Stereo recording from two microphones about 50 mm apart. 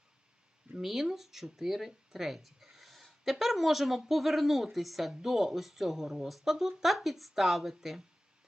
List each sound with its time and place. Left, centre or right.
0.8 s speech: centre